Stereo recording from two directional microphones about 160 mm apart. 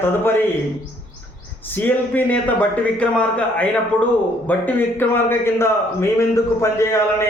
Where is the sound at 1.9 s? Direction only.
10° left (ahead or behind).